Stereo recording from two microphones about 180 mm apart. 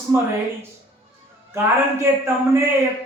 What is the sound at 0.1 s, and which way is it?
Speech, 15° right (ahead or behind).